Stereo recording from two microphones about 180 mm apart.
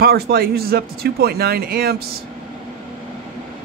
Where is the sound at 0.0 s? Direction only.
55° right (ahead or behind).